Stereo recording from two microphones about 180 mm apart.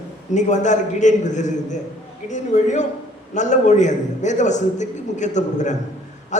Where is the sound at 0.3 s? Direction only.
40° left (ahead or behind).